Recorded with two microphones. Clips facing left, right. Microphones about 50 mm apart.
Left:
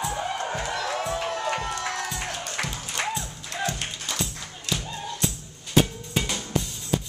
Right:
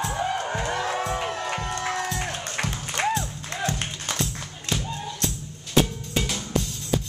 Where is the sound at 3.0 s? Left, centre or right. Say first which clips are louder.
Right 5 dB; right.